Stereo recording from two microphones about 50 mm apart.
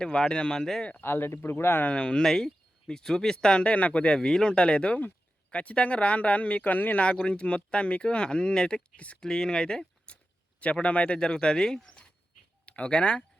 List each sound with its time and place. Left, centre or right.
0.0 s speech: centre
1.0 s speech: left
1.8 s speech: left
2.2 s speech: centre; by 7.0 s left
7.3 s speech: left
10.6 s speech: left